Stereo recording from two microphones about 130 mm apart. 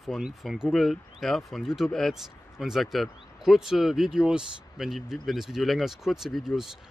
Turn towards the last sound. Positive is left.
turn(degrees=-5)  # may be behind; listen again after turning